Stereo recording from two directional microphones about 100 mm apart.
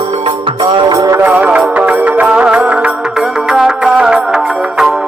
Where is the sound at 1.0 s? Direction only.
30° right (ahead or behind).